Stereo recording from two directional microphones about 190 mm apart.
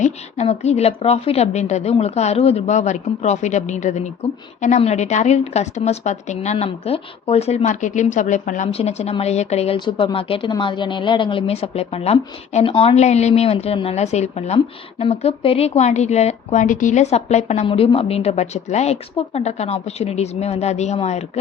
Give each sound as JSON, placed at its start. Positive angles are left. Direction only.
{"t": 0.0, "sound": "a woman's voice", "side_deg": 35}